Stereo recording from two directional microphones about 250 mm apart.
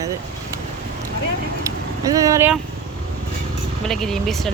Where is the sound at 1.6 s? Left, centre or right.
Centre.